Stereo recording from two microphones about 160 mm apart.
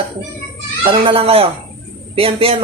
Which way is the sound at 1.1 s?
35° right (ahead or behind).